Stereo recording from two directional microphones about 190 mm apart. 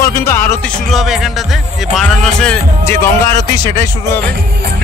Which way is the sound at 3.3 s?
20° left (ahead or behind).